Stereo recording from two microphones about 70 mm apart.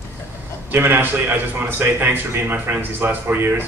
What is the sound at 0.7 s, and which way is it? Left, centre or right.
A man's voice, right.